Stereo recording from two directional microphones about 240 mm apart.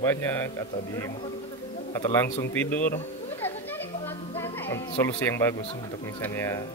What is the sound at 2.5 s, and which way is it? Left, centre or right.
Speech, centre.